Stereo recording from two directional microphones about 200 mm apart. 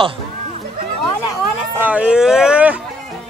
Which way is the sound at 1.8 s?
5° right (ahead or behind).